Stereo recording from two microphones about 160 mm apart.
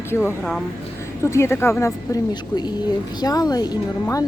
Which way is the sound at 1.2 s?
15° left (ahead or behind).